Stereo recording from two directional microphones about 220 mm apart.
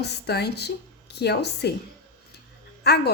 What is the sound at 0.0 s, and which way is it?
A woman's voice, 45° left (ahead or behind).